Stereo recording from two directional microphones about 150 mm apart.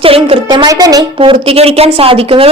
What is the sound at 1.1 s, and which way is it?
A woman's voice, 40° right (ahead or behind).